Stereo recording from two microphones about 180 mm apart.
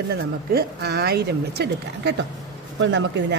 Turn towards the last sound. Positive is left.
turn(degrees=-80)